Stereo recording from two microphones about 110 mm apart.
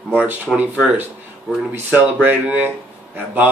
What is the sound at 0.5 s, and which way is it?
Speech, 15° right (ahead or behind).